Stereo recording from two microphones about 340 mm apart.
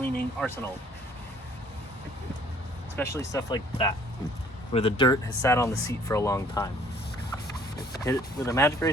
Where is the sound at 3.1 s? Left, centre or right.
Centre.